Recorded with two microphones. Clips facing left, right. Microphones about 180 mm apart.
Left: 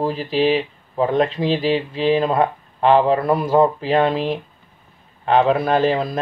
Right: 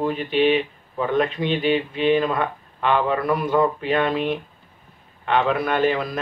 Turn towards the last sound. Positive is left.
turn(degrees=30)  # may be behind; listen again after turning